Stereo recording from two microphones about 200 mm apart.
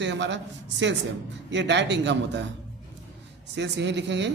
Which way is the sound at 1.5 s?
60° right (ahead or behind).